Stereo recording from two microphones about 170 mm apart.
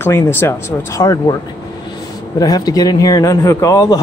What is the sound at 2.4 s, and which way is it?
A man's voice, 20° left (ahead or behind).